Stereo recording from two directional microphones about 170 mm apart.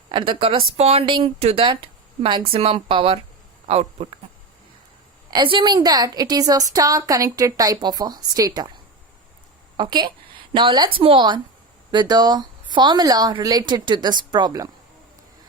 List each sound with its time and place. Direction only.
0.1 s speech: 30° right (ahead or behind)
5.3 s a woman's voice: 30° right (ahead or behind)
9.7 s a woman's voice: 25° right (ahead or behind)